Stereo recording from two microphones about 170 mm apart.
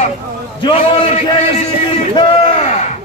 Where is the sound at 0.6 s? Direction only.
30° left (ahead or behind).